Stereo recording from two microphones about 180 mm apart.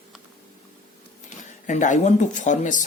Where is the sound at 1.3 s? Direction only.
45° left (ahead or behind).